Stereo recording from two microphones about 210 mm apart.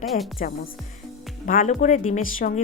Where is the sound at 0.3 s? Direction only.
45° left (ahead or behind).